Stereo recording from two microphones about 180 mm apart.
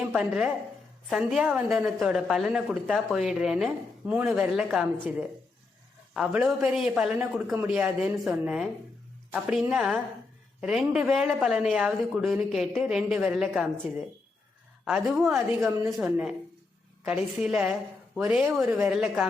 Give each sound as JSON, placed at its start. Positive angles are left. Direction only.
{"t": 0.0, "sound": "a woman's voice", "side_deg": -5}
{"t": 14.8, "sound": "a woman's voice", "side_deg": 0}